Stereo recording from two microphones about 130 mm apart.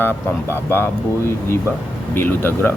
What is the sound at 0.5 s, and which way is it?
Speech, 15° left (ahead or behind).